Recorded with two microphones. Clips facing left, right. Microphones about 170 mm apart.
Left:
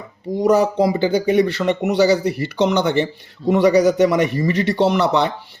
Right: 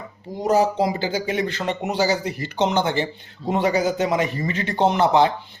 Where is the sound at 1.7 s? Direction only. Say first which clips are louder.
Left 7 dB; 65° left (ahead or behind).